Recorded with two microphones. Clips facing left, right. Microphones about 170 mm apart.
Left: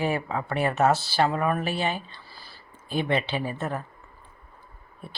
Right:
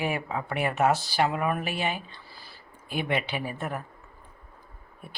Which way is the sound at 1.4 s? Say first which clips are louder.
Left 2 dB; 15° right (ahead or behind).